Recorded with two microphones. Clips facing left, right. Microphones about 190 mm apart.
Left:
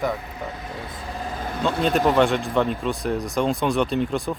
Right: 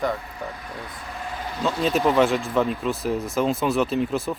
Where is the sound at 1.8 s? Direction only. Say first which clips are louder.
Even; centre (ahead or behind).